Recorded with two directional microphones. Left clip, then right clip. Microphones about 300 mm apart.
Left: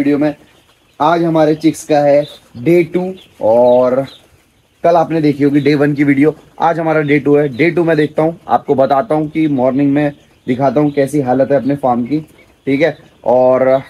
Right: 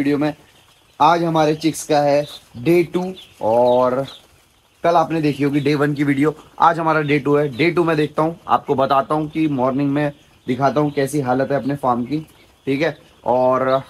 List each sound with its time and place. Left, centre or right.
0.0 s speech: centre
1.5 s chicken: centre
1.9 s speech: centre
3.0 s chicken: centre
4.8 s speech: centre